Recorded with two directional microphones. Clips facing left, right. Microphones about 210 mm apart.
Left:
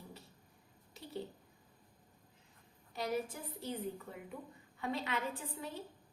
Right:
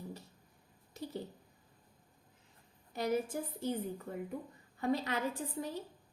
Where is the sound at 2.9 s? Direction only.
50° right (ahead or behind).